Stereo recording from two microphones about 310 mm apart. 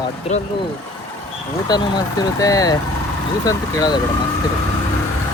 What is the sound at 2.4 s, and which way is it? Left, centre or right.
Speech, centre.